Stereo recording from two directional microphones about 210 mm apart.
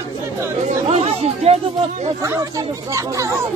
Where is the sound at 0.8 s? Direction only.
30° right (ahead or behind).